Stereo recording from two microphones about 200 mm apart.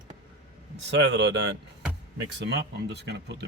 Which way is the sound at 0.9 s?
60° right (ahead or behind).